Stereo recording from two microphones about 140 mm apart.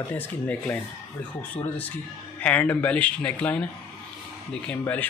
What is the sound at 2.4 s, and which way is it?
Speech, 10° left (ahead or behind).